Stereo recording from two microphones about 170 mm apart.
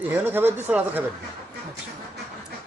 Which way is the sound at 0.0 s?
10° right (ahead or behind).